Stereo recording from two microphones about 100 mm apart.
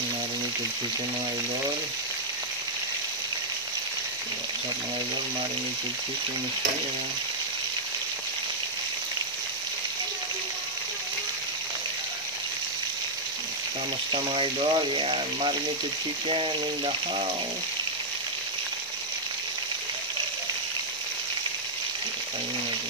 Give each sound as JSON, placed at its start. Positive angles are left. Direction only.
{"t": 14.1, "sound": "speech", "side_deg": -60}